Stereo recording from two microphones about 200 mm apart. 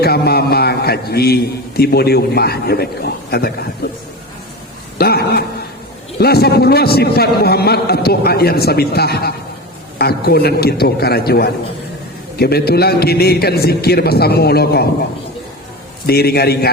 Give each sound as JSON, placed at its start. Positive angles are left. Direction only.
{"t": 0.0, "sound": "a man's voice", "side_deg": 50}
{"t": 4.9, "sound": "a man's voice", "side_deg": 50}
{"t": 16.0, "sound": "a man's voice", "side_deg": 50}